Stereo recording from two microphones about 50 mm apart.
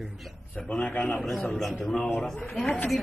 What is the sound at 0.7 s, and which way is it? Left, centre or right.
Speech, left.